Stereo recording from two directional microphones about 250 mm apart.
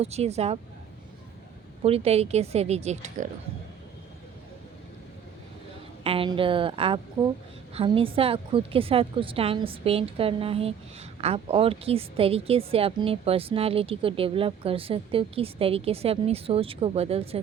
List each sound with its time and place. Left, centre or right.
0.0 s a woman's voice: right
1.8 s a woman's voice: right
6.0 s a woman's voice: right